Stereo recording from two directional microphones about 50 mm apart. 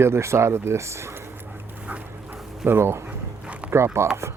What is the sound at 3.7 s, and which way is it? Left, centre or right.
Speech, right.